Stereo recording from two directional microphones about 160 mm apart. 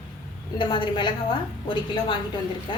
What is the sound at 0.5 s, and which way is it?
A woman's voice, 30° left (ahead or behind).